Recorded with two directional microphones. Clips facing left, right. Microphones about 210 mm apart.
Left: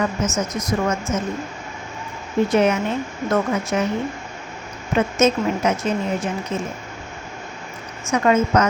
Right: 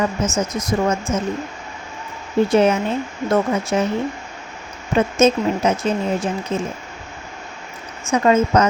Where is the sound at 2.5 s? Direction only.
30° right (ahead or behind).